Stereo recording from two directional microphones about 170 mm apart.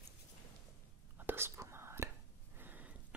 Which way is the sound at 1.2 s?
10° right (ahead or behind).